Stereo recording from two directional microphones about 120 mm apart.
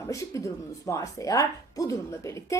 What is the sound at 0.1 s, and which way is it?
A woman's voice, 25° left (ahead or behind).